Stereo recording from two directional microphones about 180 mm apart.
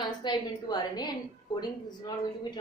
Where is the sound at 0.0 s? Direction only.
25° left (ahead or behind).